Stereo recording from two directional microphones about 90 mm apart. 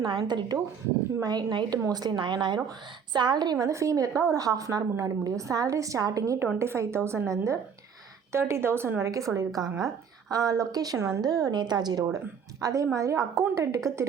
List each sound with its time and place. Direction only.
0.0 s a woman's voice: 55° right (ahead or behind)
6.6 s a woman's voice: 30° right (ahead or behind)
9.5 s a woman's voice: 5° right (ahead or behind)
10.3 s a woman's voice: 40° right (ahead or behind)